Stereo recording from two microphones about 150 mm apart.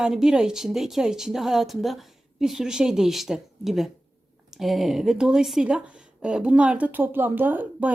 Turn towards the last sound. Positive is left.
turn(degrees=-10)  # may be behind; listen again after turning